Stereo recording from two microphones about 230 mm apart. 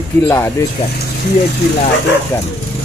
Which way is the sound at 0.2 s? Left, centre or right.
Centre.